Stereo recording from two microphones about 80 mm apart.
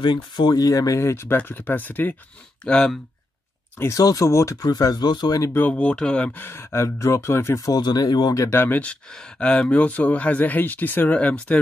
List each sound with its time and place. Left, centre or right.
0.0 s speech: left
0.6 s speech: left
1.3 s speech: left
2.6 s speech: centre
3.9 s speech: left
5.4 s speech: left
5.7 s speech: centre
6.4 s speech: left
7.6 s speech: left
8.5 s speech: left
9.1 s speech: centre